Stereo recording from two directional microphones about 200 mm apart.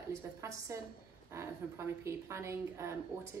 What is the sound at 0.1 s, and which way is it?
A woman's voice, 15° right (ahead or behind).